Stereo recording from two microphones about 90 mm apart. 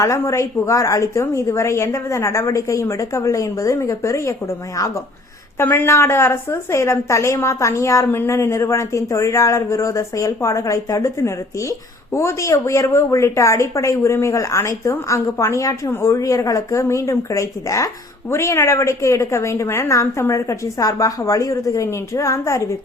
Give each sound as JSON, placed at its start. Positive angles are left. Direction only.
{"t": 0.0, "sound": "a woman's voice", "side_deg": 35}
{"t": 5.5, "sound": "a woman's voice", "side_deg": 25}